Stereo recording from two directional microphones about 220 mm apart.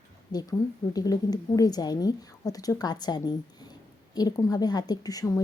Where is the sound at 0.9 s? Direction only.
15° left (ahead or behind).